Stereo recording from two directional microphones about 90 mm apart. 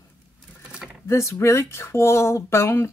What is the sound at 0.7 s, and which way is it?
Typing, 10° right (ahead or behind).